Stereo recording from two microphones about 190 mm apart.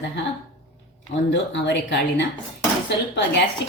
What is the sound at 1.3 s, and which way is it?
Speech, 65° left (ahead or behind).